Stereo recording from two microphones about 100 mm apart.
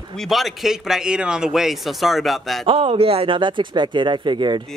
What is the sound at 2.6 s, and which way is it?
Speech, 75° right (ahead or behind).